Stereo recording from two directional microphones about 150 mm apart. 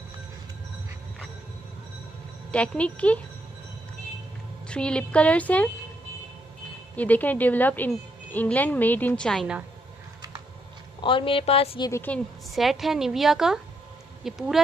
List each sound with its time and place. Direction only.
2.5 s a woman's voice: 10° left (ahead or behind)
4.6 s a woman's voice: 5° left (ahead or behind)
7.0 s a woman's voice: 10° left (ahead or behind)
11.0 s a woman's voice: 35° left (ahead or behind)
11.9 s a woman's voice: 15° left (ahead or behind)
12.5 s a woman's voice: centre (ahead or behind)